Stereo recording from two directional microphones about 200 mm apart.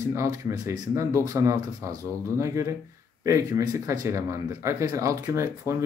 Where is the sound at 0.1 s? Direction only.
15° right (ahead or behind).